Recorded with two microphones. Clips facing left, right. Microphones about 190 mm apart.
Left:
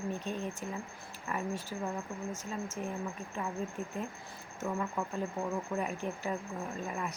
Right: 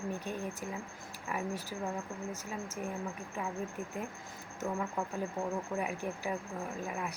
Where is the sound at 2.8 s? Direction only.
10° right (ahead or behind).